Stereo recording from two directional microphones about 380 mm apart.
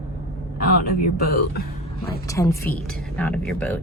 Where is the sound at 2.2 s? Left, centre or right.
Centre.